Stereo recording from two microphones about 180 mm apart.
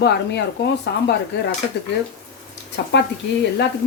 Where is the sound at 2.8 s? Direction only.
70° left (ahead or behind).